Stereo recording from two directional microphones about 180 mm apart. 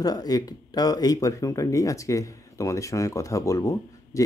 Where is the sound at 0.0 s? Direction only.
20° left (ahead or behind).